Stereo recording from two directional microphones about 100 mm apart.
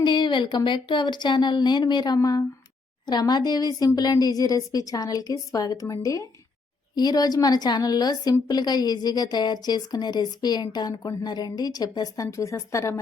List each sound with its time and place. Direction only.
0.0 s a woman's voice: 50° left (ahead or behind); by 13.0 s 30° left (ahead or behind)